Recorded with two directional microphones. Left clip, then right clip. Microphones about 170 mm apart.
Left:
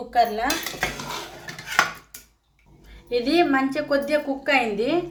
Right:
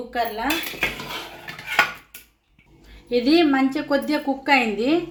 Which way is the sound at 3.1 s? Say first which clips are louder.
Right 2 dB; 35° right (ahead or behind).